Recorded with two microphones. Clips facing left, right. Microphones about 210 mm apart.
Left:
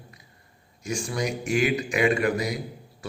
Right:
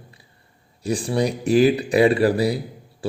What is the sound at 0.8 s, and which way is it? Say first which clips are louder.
A man's voice: right 7 dB; 35° right (ahead or behind).